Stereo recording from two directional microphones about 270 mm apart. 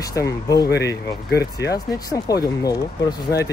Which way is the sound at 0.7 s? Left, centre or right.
Left.